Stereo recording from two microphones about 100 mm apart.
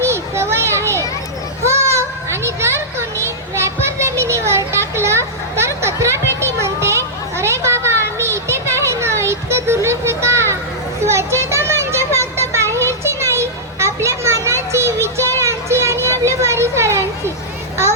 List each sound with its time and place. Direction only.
0.0 s children playing: 25° right (ahead or behind)
8.2 s a sound: 25° right (ahead or behind)
11.0 s children playing: 30° right (ahead or behind)